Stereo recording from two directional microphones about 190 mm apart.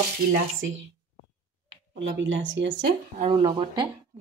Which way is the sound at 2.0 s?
80° right.